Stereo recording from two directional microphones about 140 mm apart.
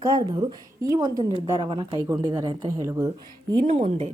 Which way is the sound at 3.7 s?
45° right (ahead or behind).